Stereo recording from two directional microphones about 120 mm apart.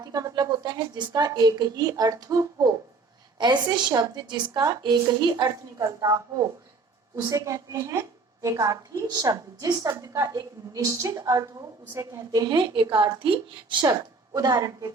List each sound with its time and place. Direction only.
0.0 s a woman's voice: 30° right (ahead or behind)
14.3 s a woman's voice: 30° right (ahead or behind)